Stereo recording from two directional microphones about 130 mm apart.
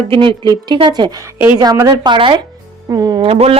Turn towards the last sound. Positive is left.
turn(degrees=-50)  # may be behind; listen again after turning